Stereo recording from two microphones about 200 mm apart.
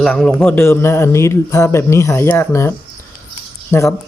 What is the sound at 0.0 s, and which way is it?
A man's voice, 5° left (ahead or behind).